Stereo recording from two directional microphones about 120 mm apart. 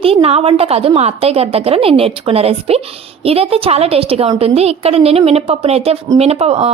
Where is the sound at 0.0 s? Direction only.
55° right (ahead or behind).